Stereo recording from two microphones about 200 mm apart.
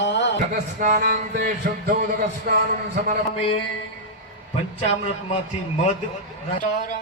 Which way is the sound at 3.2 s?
30° left (ahead or behind).